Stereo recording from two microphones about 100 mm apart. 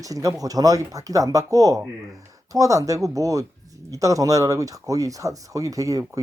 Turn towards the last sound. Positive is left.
turn(degrees=-35)  # may be behind; listen again after turning